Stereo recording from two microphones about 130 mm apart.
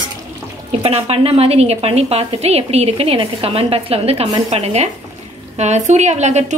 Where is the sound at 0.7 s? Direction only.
50° right (ahead or behind).